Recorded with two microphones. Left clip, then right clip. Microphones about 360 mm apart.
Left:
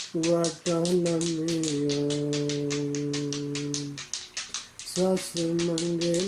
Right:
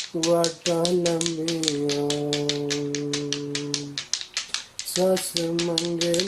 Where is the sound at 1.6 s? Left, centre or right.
Right.